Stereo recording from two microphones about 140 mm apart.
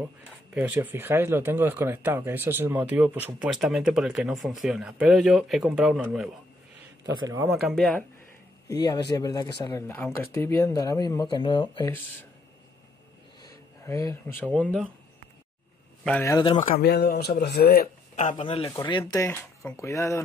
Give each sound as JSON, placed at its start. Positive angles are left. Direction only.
{"t": 0.6, "sound": "speech", "side_deg": -10}
{"t": 3.5, "sound": "speech", "side_deg": 0}
{"t": 7.1, "sound": "a man's voice", "side_deg": -25}
{"t": 7.6, "sound": "speech", "side_deg": 5}
{"t": 8.6, "sound": "speech", "side_deg": 25}
{"t": 13.8, "sound": "speech", "side_deg": 20}
{"t": 14.4, "sound": "speech", "side_deg": 10}
{"t": 16.2, "sound": "speech", "side_deg": 20}
{"t": 16.5, "sound": "speech", "side_deg": 70}
{"t": 17.6, "sound": "speech", "side_deg": 90}
{"t": 18.4, "sound": "speech", "side_deg": 40}
{"t": 19.1, "sound": "speech", "side_deg": 20}